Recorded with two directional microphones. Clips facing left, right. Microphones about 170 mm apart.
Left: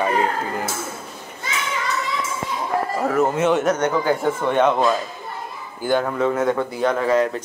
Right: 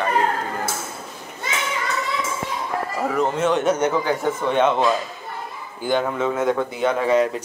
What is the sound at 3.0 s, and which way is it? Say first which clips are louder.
Speech: left 1 dB; 5° left (ahead or behind).